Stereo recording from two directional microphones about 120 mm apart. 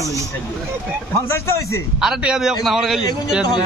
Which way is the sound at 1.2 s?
25° left (ahead or behind).